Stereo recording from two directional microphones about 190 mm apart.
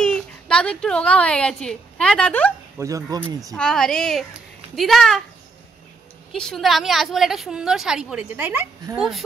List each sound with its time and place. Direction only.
0.0 s speech: 5° left (ahead or behind)
2.8 s speech: 15° right (ahead or behind)
3.5 s a woman's voice: 5° left (ahead or behind)
6.3 s a woman's voice: centre (ahead or behind)